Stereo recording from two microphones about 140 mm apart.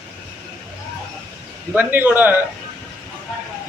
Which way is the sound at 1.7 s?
15° right (ahead or behind).